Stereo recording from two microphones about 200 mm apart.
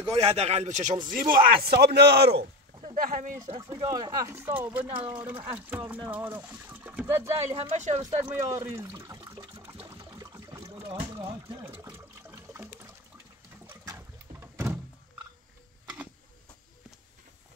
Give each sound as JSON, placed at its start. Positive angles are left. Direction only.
{"t": 0.1, "sound": "speech", "side_deg": -30}
{"t": 1.3, "sound": "a man's voice", "side_deg": -50}
{"t": 2.8, "sound": "speech", "side_deg": -40}
{"t": 3.4, "sound": "speech", "side_deg": -25}
{"t": 7.5, "sound": "speech", "side_deg": -35}
{"t": 8.3, "sound": "speech", "side_deg": -15}
{"t": 9.8, "sound": "a sound", "side_deg": -15}
{"t": 10.6, "sound": "trickle", "side_deg": -25}
{"t": 12.3, "sound": "toilet flush", "side_deg": -15}
{"t": 13.7, "sound": "boat", "side_deg": -15}